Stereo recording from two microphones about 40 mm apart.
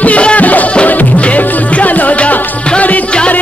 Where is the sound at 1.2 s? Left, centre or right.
Left.